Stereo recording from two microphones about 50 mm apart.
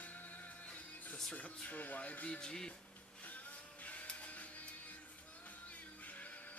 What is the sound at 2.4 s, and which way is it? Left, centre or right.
Speech, centre.